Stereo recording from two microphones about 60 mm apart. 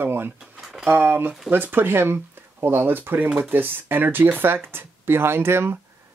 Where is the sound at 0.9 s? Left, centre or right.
Right.